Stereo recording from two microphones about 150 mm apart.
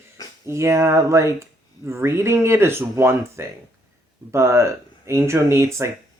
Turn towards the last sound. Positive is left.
turn(degrees=-20)  # may be behind; listen again after turning